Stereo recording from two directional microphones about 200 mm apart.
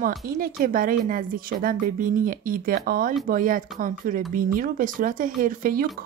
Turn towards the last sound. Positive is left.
turn(degrees=-45)  # may be behind; listen again after turning